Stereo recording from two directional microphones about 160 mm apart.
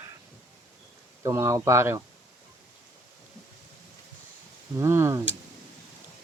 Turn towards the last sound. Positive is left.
turn(degrees=-15)  # may be behind; listen again after turning